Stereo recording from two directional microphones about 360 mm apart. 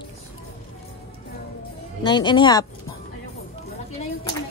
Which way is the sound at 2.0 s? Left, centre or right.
Centre.